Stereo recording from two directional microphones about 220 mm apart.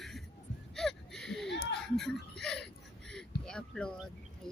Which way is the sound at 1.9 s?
Centre (ahead or behind).